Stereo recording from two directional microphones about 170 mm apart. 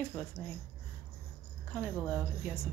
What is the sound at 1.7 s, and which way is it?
Speech, 10° left (ahead or behind).